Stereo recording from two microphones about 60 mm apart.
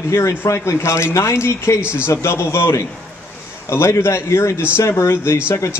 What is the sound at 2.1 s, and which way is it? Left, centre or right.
Speech, left.